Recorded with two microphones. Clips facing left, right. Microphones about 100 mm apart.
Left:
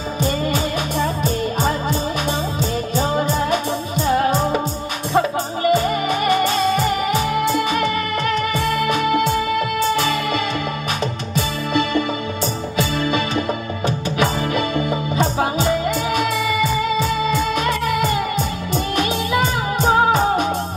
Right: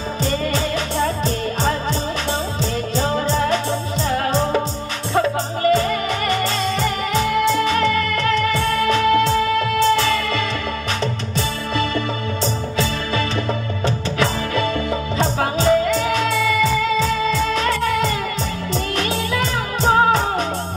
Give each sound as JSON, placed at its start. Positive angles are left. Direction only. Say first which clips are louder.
{"t": 3.0, "sound": "music", "louder": "even", "side_deg": 15}
{"t": 5.6, "sound": "music", "louder": "even", "side_deg": 15}
{"t": 13.8, "sound": "music", "louder": "left 1 dB", "side_deg": 20}
{"t": 18.9, "sound": "music", "louder": "left 4 dB", "side_deg": 20}